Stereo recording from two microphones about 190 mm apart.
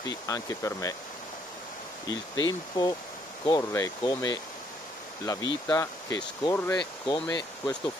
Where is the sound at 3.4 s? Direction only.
20° left (ahead or behind).